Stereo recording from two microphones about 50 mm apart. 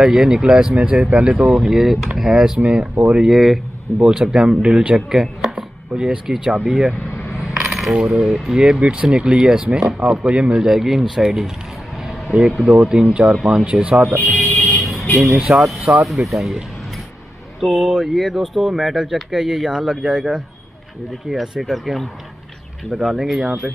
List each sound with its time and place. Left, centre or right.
0.0 s speech: centre
1.0 s speech: right
1.5 s speech: centre
2.6 s speech: right
3.3 s speech: centre
4.0 s speech: centre
7.4 s coin: centre
9.0 s speech: centre
12.3 s speech: centre
13.3 s speech: centre
14.0 s vehicle: centre
15.1 s speech: centre
17.6 s speech: centre
22.9 s speech: centre